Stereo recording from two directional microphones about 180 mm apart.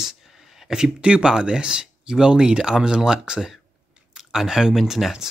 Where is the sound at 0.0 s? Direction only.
Centre (ahead or behind).